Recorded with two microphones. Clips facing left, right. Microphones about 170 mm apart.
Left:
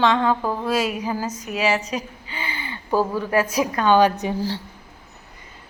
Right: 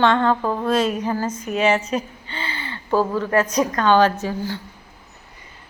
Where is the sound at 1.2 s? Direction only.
50° right (ahead or behind).